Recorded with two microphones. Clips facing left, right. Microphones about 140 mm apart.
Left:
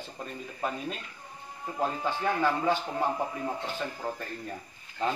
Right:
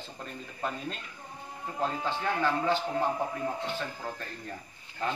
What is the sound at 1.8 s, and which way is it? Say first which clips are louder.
Speech: left 2 dB; 15° left (ahead or behind).